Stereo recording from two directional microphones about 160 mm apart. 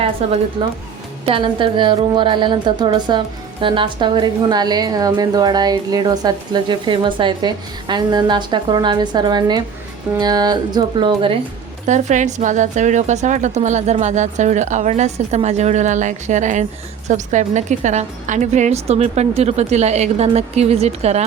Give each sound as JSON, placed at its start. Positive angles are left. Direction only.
{"t": 0.2, "sound": "a woman's voice", "side_deg": -40}
{"t": 11.9, "sound": "a woman's voice", "side_deg": -50}